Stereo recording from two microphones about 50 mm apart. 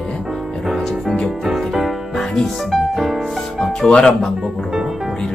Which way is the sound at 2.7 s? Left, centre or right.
Centre.